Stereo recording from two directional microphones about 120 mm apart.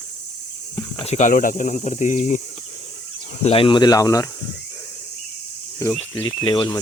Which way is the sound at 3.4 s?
50° left (ahead or behind).